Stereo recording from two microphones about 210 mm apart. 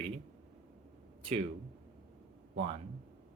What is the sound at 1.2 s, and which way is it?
Speech, 25° right (ahead or behind).